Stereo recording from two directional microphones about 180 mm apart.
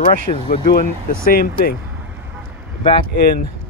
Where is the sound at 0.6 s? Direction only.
50° left (ahead or behind).